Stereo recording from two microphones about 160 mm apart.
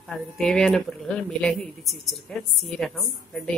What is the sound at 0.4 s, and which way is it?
Speech, 5° left (ahead or behind).